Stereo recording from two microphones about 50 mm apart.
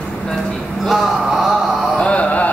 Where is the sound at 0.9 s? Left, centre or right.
Centre.